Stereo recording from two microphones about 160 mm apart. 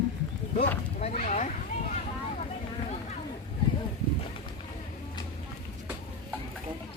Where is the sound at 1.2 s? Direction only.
50° left (ahead or behind).